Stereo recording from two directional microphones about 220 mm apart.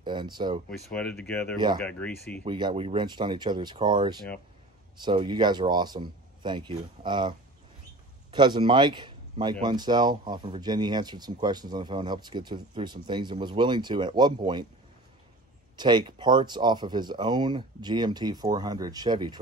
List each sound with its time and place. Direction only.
0.0 s speech: 20° right (ahead or behind)
0.9 s speech: 5° left (ahead or behind)
2.4 s speech: 20° right (ahead or behind)
15.7 s speech: 20° right (ahead or behind)